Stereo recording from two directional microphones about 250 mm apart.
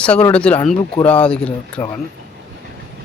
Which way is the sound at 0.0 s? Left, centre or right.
Centre.